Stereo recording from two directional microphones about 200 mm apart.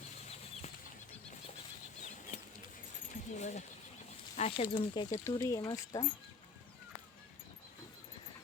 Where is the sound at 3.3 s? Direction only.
35° left (ahead or behind); by 6.0 s 20° left (ahead or behind).